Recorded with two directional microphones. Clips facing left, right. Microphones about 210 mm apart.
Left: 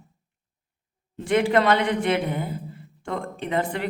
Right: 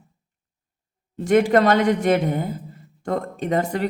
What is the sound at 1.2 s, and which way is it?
Speech, 45° right (ahead or behind).